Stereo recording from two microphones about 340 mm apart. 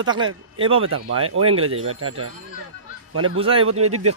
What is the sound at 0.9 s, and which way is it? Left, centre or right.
Speech, right.